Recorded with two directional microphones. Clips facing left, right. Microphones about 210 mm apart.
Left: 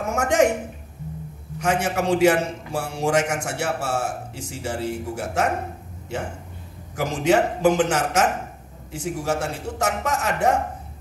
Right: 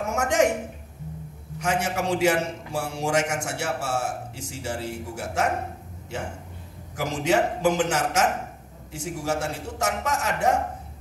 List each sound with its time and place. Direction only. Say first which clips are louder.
0.1 s a sound: left 3 dB; 55° left (ahead or behind)
1.6 s a man's voice: left 3 dB; 55° left (ahead or behind)
7.0 s a man's voice: left 3 dB; 55° left (ahead or behind)